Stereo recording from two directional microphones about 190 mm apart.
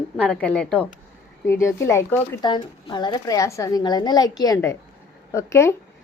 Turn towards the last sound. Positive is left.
turn(degrees=15)  # may be behind; listen again after turning